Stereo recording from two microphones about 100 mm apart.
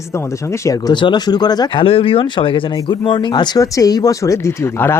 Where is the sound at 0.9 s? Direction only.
50° left (ahead or behind).